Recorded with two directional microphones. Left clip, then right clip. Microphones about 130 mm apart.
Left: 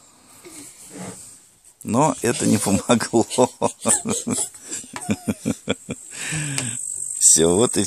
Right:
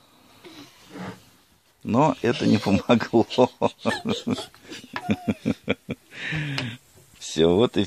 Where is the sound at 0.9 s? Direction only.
45° left (ahead or behind).